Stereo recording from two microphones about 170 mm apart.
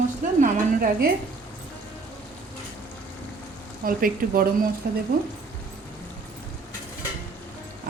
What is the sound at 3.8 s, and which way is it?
Speech, 60° right (ahead or behind).